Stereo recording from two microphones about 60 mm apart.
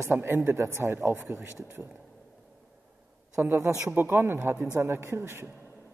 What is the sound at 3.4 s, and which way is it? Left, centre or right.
A man's voice, right.